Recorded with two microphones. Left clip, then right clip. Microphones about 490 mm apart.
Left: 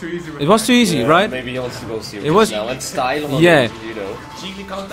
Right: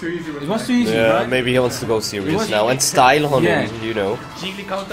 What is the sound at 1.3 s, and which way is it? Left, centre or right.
Speech, right.